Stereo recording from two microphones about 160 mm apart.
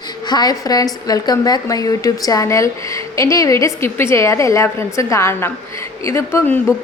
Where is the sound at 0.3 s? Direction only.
25° left (ahead or behind).